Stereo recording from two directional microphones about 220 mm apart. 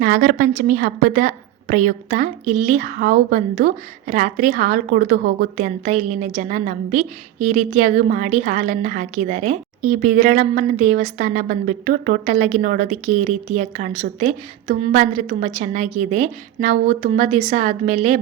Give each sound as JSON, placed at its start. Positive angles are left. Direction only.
{"t": 0.0, "sound": "a woman's voice", "side_deg": -40}